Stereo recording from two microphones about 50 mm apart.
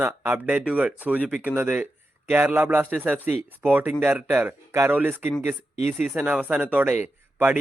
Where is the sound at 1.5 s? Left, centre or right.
Right.